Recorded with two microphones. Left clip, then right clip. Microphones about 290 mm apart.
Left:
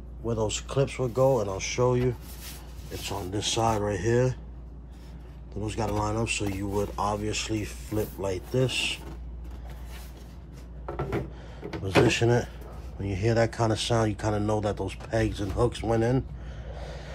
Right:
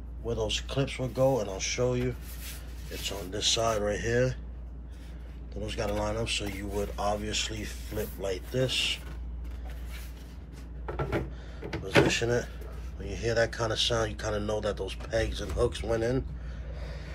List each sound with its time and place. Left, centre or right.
0.2 s speech: left
3.1 s speech: left
5.7 s speech: left
11.8 s speech: left
16.7 s a sound: left